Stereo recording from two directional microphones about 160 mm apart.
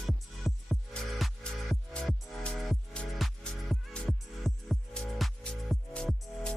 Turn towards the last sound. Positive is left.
turn(degrees=5)  # may be behind; listen again after turning